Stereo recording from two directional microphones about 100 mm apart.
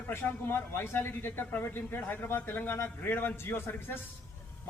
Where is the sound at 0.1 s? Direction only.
25° left (ahead or behind).